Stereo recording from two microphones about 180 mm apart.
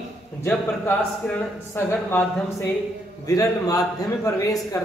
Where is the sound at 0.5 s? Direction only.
5° left (ahead or behind).